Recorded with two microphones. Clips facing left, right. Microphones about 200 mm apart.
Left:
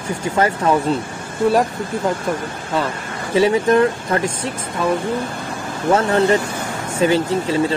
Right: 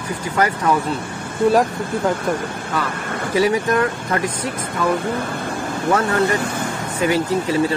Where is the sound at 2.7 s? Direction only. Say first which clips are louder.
Left 3 dB; 25° left (ahead or behind).